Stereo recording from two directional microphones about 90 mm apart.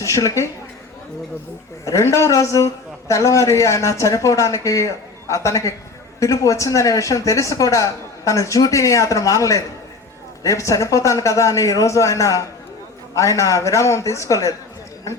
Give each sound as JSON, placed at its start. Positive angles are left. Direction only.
{"t": 0.0, "sound": "speech", "side_deg": 35}
{"t": 1.8, "sound": "speech", "side_deg": 35}